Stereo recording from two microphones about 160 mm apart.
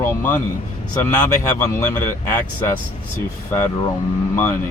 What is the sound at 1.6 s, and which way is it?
Speech, 15° left (ahead or behind).